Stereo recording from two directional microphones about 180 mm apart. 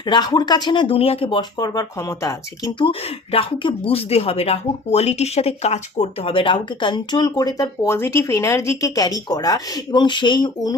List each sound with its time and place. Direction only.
0.0 s speech: 25° left (ahead or behind)